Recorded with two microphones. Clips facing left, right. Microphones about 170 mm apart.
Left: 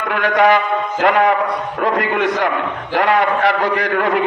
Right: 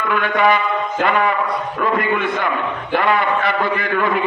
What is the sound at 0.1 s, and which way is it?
A man's voice, 70° left (ahead or behind).